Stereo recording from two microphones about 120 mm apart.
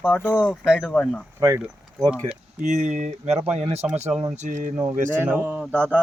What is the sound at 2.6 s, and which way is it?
Speech, 85° right.